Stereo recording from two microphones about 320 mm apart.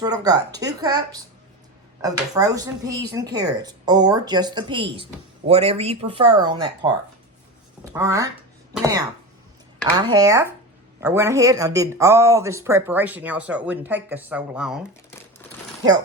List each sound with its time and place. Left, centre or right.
0.0 s speech: centre
7.9 s speech: centre